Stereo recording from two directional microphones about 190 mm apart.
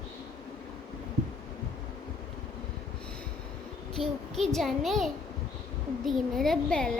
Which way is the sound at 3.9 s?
Centre (ahead or behind).